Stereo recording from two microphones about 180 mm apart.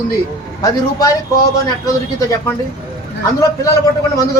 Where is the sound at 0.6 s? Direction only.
20° left (ahead or behind).